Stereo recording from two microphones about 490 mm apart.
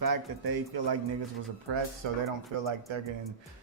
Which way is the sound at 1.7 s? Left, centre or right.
Right.